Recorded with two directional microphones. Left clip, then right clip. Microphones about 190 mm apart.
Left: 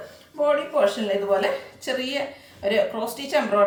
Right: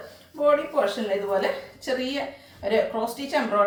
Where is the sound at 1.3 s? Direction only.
25° left (ahead or behind).